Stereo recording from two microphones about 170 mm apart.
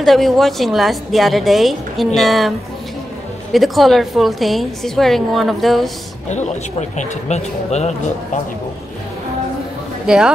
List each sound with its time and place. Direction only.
0.0 s a woman's voice: centre (ahead or behind)
3.5 s a woman's voice: centre (ahead or behind)
6.2 s speech: 45° left (ahead or behind)
10.0 s speech: 5° right (ahead or behind)